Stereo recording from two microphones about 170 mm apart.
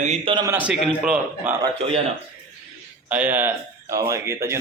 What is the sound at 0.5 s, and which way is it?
A man's voice, 10° right (ahead or behind).